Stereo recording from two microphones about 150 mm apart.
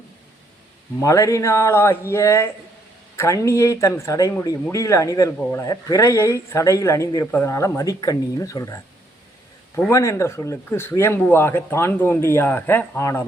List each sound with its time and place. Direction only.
1.0 s speech: 20° left (ahead or behind)
5.4 s speech: 10° left (ahead or behind)
5.6 s speech: 25° left (ahead or behind)
9.9 s speech: 20° left (ahead or behind)